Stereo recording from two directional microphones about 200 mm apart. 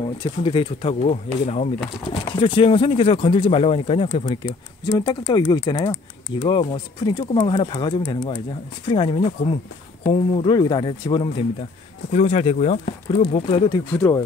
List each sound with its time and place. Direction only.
0.2 s speech: 25° left (ahead or behind)
4.5 s speech: 20° left (ahead or behind)
13.9 s speech: 10° left (ahead or behind)